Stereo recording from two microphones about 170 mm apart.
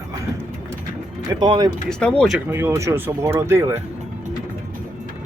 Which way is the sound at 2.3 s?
10° right (ahead or behind).